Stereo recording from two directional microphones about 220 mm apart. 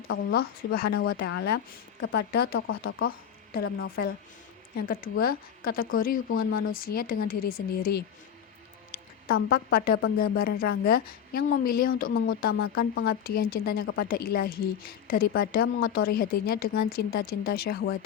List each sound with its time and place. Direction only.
0.1 s a woman's voice: 50° left (ahead or behind)
12.5 s speech: 70° left (ahead or behind)
12.9 s speech: 45° left (ahead or behind)